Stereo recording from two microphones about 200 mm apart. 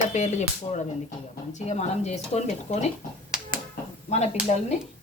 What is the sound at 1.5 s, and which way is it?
Speech, 35° left (ahead or behind).